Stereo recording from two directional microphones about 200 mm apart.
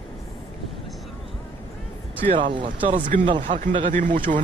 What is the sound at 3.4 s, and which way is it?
Speech, 40° right (ahead or behind).